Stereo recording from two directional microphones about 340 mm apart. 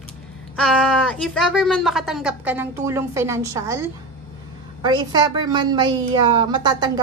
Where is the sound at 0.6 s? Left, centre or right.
Centre.